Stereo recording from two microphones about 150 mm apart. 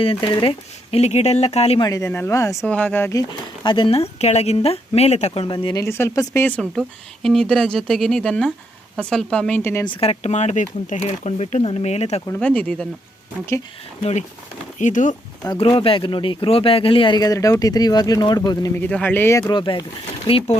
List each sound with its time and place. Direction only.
0.0 s speech: 35° left (ahead or behind)
1.8 s speech: 20° left (ahead or behind)
2.6 s speech: 10° left (ahead or behind); by 5.5 s 40° left (ahead or behind)
5.8 s speech: 20° left (ahead or behind)
6.6 s speech: centre (ahead or behind)
9.8 s speech: 35° left (ahead or behind)
12.4 s speech: 10° left (ahead or behind)
14.0 s speech: 50° left (ahead or behind)
15.4 s speech: 35° left (ahead or behind)
18.8 s speech: 10° left (ahead or behind); by 20.6 s 40° left (ahead or behind)